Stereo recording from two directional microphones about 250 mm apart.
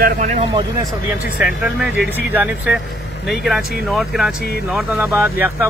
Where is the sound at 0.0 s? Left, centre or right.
Right.